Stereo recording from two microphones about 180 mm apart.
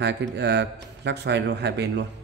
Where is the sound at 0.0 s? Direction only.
70° right (ahead or behind).